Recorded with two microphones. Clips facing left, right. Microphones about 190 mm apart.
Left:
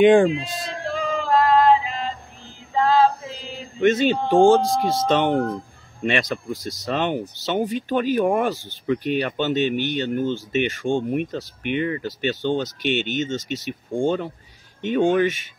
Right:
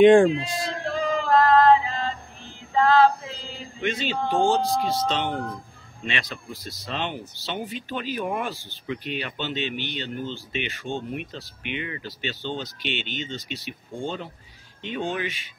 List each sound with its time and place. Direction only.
0.0 s speech: centre (ahead or behind)
0.5 s male singing: centre (ahead or behind)
1.3 s yodeling: 10° left (ahead or behind)
2.7 s female singing: 20° left (ahead or behind)
3.8 s speech: 50° left (ahead or behind)